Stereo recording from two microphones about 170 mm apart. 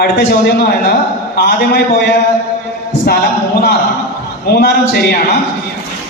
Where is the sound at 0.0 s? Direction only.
65° left (ahead or behind).